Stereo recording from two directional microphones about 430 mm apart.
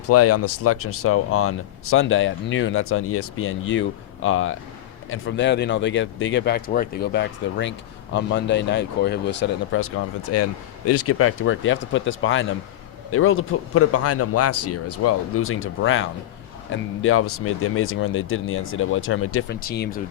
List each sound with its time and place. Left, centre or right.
0.1 s speech: left